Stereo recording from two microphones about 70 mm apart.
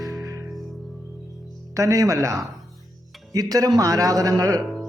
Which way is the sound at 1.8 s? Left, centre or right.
Right.